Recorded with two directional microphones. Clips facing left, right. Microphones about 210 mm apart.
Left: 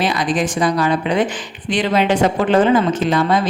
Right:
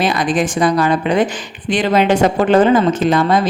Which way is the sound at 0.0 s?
50° right (ahead or behind).